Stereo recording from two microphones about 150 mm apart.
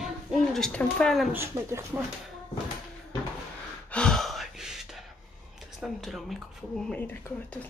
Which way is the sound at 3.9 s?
5° left (ahead or behind).